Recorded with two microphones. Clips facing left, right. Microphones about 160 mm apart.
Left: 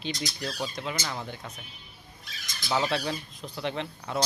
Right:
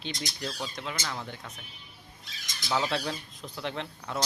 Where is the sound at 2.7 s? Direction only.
5° left (ahead or behind).